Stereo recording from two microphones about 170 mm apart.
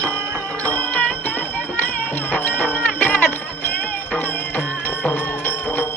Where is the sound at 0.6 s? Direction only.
10° left (ahead or behind).